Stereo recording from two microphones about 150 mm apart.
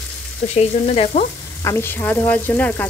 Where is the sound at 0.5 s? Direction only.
45° left (ahead or behind).